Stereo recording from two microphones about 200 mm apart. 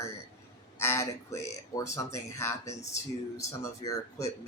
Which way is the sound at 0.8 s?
15° left (ahead or behind).